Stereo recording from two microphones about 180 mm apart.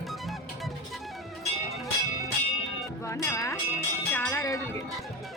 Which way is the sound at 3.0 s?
15° left (ahead or behind).